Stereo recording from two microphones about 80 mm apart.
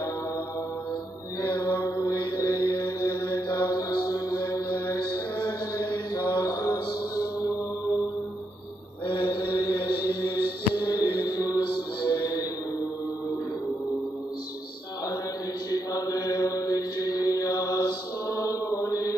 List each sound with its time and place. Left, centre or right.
1.5 s mantra: left
9.0 s mantra: left
12.1 s music: left
15.7 s mantra: left